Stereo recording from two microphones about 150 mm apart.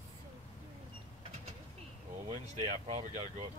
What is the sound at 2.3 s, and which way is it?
Speech, 50° right (ahead or behind).